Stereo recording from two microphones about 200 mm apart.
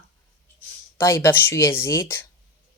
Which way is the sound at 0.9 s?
15° left (ahead or behind).